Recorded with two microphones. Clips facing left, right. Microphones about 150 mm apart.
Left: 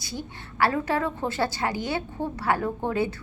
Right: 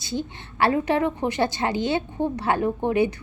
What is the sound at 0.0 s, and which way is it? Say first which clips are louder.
A woman's voice: right 6 dB; 25° right (ahead or behind).